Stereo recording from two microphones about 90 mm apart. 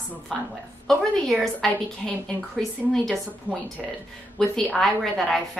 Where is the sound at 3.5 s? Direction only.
25° left (ahead or behind).